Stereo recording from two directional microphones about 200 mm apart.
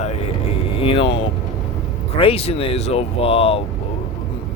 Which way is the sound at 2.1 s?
30° left (ahead or behind).